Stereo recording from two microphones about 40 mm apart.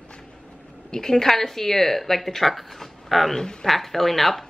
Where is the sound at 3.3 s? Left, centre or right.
Centre.